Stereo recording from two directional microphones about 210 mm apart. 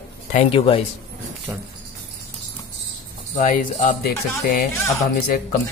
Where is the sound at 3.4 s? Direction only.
40° left (ahead or behind).